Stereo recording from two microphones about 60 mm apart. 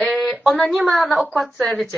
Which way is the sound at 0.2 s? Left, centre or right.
Centre.